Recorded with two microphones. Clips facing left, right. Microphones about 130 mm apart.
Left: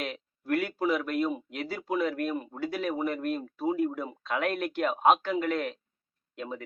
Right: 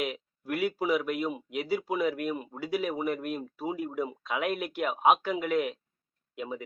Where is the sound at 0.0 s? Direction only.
10° right (ahead or behind).